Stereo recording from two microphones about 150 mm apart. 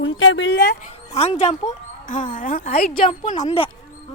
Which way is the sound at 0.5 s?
90° left.